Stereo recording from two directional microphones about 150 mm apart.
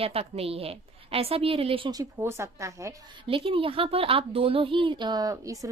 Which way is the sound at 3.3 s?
35° right (ahead or behind).